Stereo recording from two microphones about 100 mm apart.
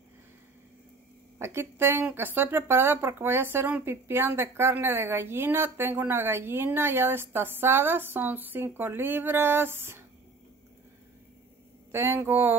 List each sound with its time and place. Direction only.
1.4 s speech: 25° right (ahead or behind)
11.9 s speech: 25° right (ahead or behind)